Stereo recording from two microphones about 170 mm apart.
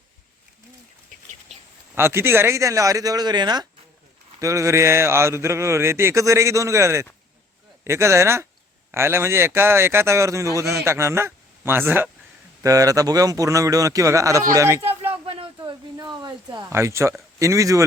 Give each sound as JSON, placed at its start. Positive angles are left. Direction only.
{"t": 2.0, "sound": "a man's voice", "side_deg": -15}
{"t": 15.1, "sound": "a sound", "side_deg": -35}
{"t": 16.6, "sound": "a man's voice", "side_deg": -15}